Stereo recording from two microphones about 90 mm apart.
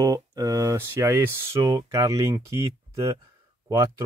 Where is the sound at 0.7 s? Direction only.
30° right (ahead or behind).